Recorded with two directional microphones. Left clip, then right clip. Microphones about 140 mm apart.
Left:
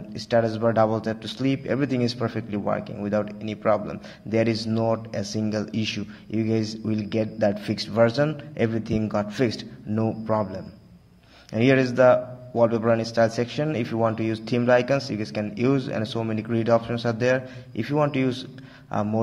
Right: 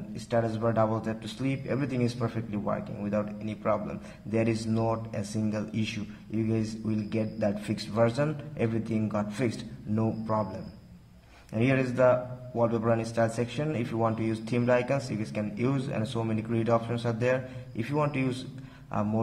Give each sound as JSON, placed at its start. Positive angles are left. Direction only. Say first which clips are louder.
{"t": 0.2, "sound": "speech", "louder": "left 7 dB", "side_deg": 30}